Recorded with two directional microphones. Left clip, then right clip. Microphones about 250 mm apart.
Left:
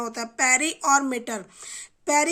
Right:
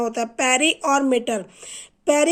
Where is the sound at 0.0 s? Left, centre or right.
Left.